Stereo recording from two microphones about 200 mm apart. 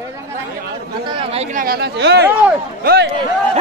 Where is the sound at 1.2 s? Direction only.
30° right (ahead or behind); by 3.0 s 45° right (ahead or behind).